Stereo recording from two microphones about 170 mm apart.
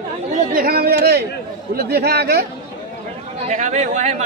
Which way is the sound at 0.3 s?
55° right (ahead or behind).